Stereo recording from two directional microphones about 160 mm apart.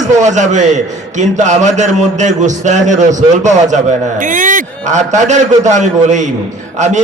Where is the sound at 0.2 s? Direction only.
50° right (ahead or behind).